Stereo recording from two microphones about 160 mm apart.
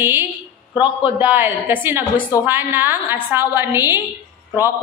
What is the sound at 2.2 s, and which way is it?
Speech, 20° left (ahead or behind).